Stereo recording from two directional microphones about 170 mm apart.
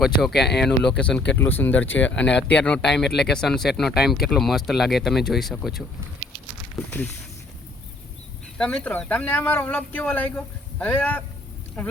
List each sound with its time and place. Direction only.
0.0 s speech: centre (ahead or behind)
0.4 s speech: 80° left
0.8 s speech: 5° left (ahead or behind)
6.7 s speech: 10° left (ahead or behind)
8.5 s speech: 5° left (ahead or behind)